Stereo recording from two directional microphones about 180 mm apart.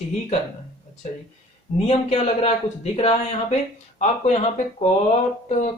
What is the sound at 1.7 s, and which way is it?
Speech, 35° left (ahead or behind).